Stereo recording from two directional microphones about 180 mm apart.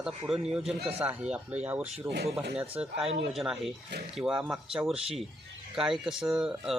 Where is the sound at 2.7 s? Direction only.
5° right (ahead or behind).